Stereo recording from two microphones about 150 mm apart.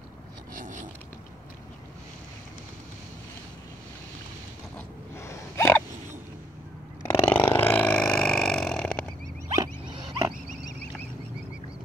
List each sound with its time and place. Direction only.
0.6 s a sound: 60° right (ahead or behind)
4.7 s gasp: 15° left (ahead or behind)
7.1 s burping: 10° left (ahead or behind)
9.6 s rodents: 30° right (ahead or behind)